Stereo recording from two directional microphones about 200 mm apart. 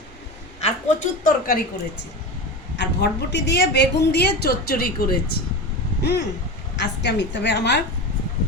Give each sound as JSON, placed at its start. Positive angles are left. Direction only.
{"t": 0.6, "sound": "a woman's voice", "side_deg": 40}
{"t": 2.7, "sound": "a woman's voice", "side_deg": 60}